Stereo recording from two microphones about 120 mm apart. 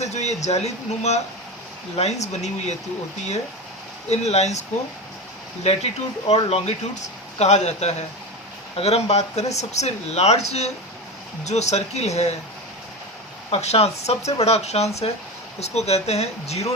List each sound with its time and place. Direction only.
0.0 s speech: 70° left (ahead or behind)
4.1 s speech: 65° left (ahead or behind)
5.6 s speech: 60° left (ahead or behind)
8.7 s speech: 60° left (ahead or behind)
13.5 s speech: 60° left (ahead or behind)